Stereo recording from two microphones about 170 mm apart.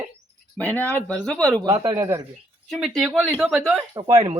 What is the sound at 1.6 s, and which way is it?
Speech, 25° right (ahead or behind).